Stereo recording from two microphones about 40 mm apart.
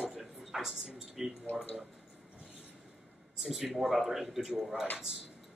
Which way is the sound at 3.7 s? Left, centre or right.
Centre.